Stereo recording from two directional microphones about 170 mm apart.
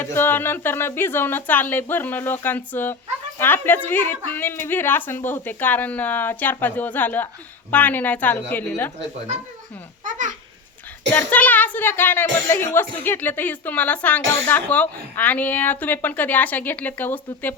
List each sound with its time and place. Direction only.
0.0 s speech: 15° left (ahead or behind)
10.0 s a sound: 50° right (ahead or behind)
11.1 s speech: 10° left (ahead or behind)